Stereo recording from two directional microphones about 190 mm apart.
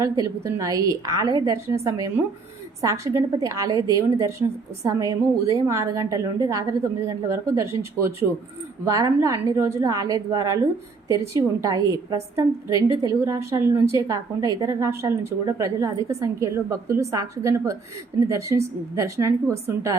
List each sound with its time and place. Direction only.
0.0 s a woman's voice: 15° right (ahead or behind)